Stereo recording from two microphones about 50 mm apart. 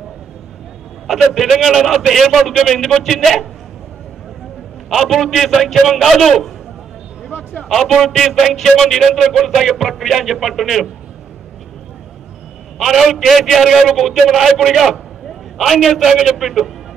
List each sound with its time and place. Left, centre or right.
1.0 s music: centre
5.1 s music: centre
7.2 s a sound: left
7.6 s music: centre
12.7 s music: centre